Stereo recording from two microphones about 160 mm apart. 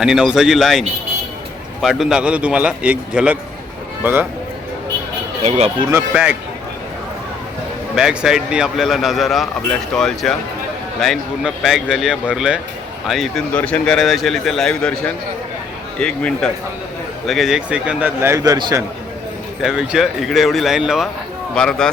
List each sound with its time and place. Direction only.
0.0 s a man's voice: 5° right (ahead or behind)
5.4 s speech: 40° right (ahead or behind)
5.9 s a man's voice: 10° right (ahead or behind)
7.9 s a man's voice: 5° right (ahead or behind); by 18.8 s 25° right (ahead or behind)
19.6 s speech: 5° right (ahead or behind)